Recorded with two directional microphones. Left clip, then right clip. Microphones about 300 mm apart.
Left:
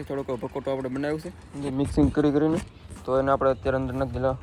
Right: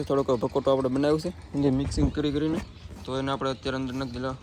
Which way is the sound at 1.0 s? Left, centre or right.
Centre.